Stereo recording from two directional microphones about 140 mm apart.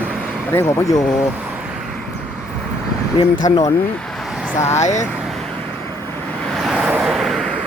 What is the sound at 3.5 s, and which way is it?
Speech, 25° left (ahead or behind).